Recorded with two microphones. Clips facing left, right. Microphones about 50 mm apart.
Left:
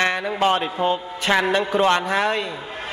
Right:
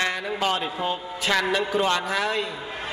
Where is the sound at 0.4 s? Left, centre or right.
Left.